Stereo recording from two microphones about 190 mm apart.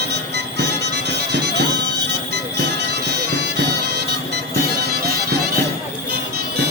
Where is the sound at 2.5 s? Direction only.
60° right (ahead or behind).